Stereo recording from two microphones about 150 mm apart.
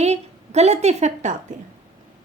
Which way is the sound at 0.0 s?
45° right (ahead or behind).